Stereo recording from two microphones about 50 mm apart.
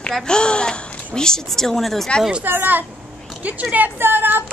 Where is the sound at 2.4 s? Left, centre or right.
Right.